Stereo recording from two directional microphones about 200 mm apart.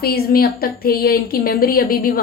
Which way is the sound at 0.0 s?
50° left (ahead or behind).